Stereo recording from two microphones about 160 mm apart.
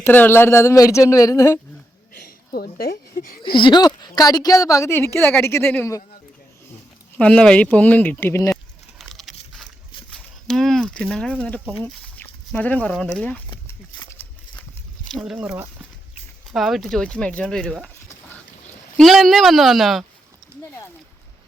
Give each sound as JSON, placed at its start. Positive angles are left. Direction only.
{"t": 0.0, "sound": "a woman's voice", "side_deg": 10}
{"t": 2.2, "sound": "a sound", "side_deg": 65}
{"t": 2.7, "sound": "speech", "side_deg": 70}
{"t": 3.5, "sound": "a woman's voice", "side_deg": 30}
{"t": 7.2, "sound": "speech", "side_deg": 10}
{"t": 9.0, "sound": "a sound", "side_deg": 0}
{"t": 10.1, "sound": "speech", "side_deg": 5}
{"t": 15.0, "sound": "a woman's voice", "side_deg": 0}